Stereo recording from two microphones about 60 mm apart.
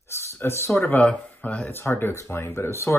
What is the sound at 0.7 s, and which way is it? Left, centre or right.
Speech, left.